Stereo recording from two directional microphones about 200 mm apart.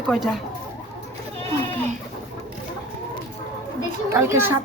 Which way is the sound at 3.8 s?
15° right (ahead or behind).